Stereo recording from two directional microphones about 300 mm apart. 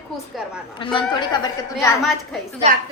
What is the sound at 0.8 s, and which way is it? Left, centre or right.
Speech, centre.